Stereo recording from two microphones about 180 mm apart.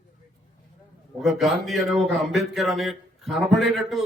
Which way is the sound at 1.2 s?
Centre (ahead or behind).